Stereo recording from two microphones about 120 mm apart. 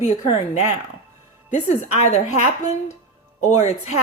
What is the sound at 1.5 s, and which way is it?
Speech, 80° left.